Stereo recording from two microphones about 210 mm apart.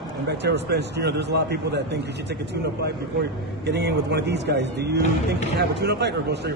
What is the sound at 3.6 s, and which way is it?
Speech, 55° right (ahead or behind).